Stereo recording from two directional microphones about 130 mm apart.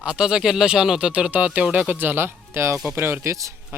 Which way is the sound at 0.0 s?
5° right (ahead or behind).